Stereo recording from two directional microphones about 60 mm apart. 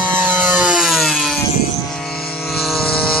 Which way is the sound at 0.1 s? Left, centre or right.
Right.